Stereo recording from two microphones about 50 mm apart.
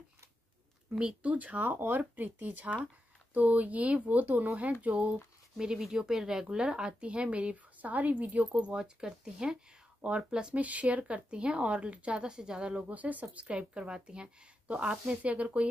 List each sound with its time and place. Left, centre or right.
0.9 s speech: right
1.7 s speech: right
5.6 s speech: centre
12.8 s speech: right